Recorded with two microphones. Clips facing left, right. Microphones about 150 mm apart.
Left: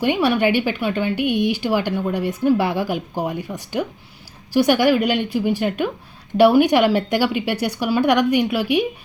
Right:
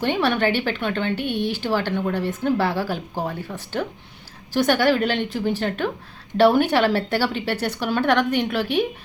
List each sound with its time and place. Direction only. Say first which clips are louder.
0.0 s a woman's voice: left 3 dB; 10° left (ahead or behind)